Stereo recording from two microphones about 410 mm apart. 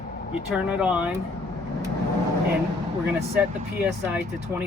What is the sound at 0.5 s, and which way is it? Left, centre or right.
Speech, centre.